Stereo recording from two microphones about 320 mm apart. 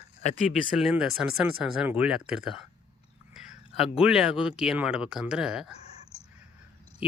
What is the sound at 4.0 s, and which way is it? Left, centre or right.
Speech, centre.